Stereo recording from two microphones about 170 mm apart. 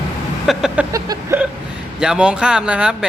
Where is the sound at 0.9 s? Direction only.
20° right (ahead or behind).